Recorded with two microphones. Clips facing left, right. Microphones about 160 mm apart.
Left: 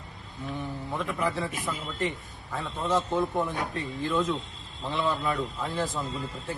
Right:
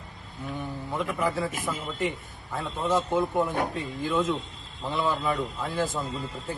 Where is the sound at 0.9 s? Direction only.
Centre (ahead or behind).